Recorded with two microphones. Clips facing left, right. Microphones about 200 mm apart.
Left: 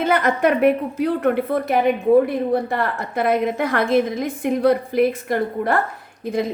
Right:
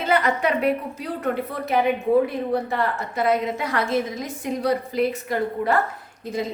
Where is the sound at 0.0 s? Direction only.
50° left (ahead or behind).